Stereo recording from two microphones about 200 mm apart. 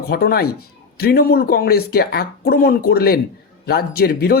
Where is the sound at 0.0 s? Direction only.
50° left (ahead or behind).